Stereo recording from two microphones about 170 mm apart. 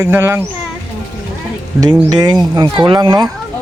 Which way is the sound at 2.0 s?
20° right (ahead or behind).